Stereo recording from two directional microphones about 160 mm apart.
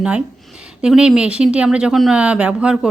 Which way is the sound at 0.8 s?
5° right (ahead or behind).